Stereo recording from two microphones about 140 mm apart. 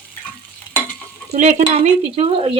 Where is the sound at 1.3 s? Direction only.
55° right (ahead or behind).